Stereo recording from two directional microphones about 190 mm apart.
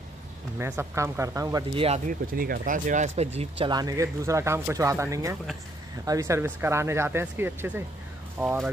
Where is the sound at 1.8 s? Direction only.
35° right (ahead or behind).